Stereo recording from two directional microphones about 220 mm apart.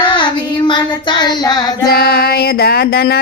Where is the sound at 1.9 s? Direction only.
45° left (ahead or behind).